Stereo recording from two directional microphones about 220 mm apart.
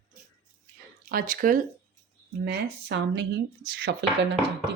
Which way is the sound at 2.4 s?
50° right (ahead or behind).